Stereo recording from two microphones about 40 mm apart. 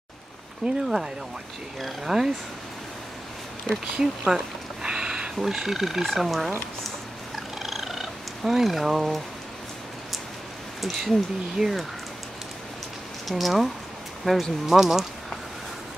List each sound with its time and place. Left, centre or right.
0.8 s speech: centre
3.6 s speech: centre
4.8 s a sound: centre
5.3 s speech: centre
7.3 s purr: centre
10.8 s speech: centre
13.3 s speech: centre
14.2 s speech: centre
14.7 s speech: centre